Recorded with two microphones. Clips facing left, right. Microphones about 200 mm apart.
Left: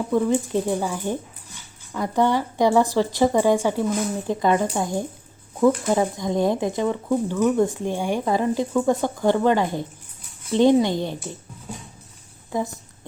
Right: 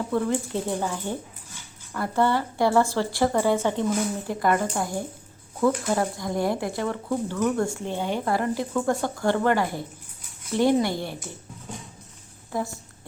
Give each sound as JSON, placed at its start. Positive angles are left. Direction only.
{"t": 0.0, "sound": "speech", "side_deg": 10}
{"t": 11.7, "sound": "clip-clop", "side_deg": 10}
{"t": 12.5, "sound": "a woman's voice", "side_deg": 20}